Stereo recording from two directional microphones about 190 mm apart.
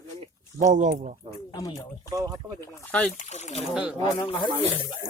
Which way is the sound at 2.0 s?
15° right (ahead or behind).